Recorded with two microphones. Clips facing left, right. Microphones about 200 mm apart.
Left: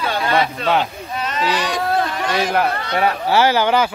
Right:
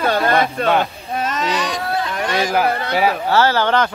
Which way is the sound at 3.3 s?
15° left (ahead or behind).